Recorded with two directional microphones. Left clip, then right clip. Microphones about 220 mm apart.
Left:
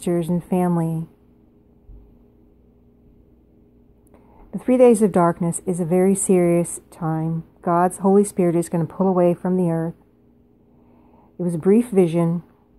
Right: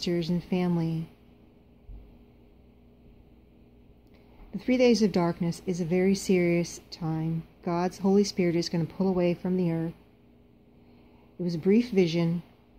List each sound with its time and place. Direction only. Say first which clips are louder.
0.1 s speech: left 11 dB; 10° left (ahead or behind)
4.5 s speech: left 9 dB; 10° left (ahead or behind)
11.6 s speech: left 7 dB; 10° left (ahead or behind)